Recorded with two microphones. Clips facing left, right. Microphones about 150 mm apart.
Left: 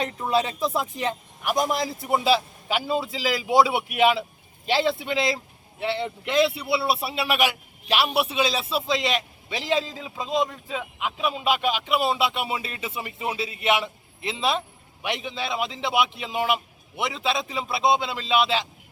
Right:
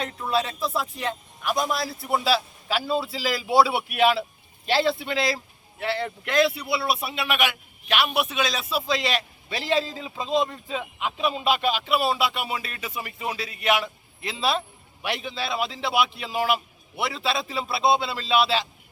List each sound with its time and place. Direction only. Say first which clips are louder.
0.0 s a man's voice: left 2 dB; 15° left (ahead or behind)